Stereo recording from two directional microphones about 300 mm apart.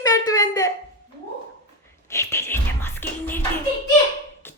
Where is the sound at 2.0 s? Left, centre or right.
Centre.